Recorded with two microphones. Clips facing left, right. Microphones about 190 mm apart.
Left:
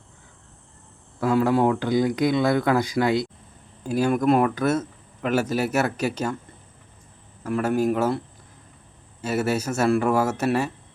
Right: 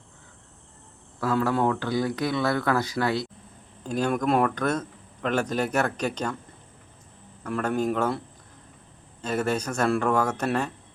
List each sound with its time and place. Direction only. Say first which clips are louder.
1.2 s speech: left 4 dB; 15° left (ahead or behind)
7.4 s speech: left 4 dB; 5° left (ahead or behind)
9.2 s speech: left 2 dB; 5° left (ahead or behind)